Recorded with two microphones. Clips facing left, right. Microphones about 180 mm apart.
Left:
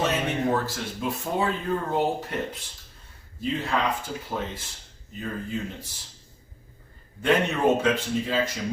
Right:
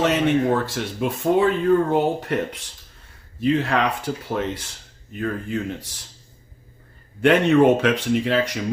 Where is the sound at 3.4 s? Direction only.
80° right.